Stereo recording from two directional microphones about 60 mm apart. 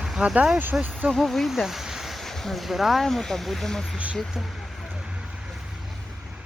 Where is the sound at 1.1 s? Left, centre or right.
Centre.